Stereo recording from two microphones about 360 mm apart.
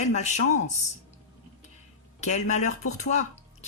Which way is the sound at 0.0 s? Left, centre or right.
Centre.